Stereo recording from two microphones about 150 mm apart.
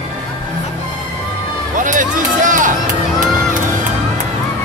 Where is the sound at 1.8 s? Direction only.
60° right (ahead or behind).